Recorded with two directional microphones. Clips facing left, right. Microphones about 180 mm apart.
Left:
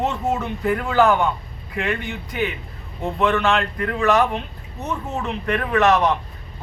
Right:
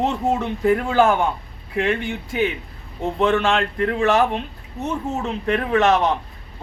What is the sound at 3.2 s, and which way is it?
Speech, 20° right (ahead or behind).